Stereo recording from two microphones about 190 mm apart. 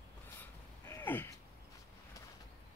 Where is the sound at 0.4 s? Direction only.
10° left (ahead or behind).